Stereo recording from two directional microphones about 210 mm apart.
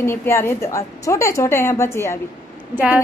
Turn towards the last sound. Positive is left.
turn(degrees=-10)  # may be behind; listen again after turning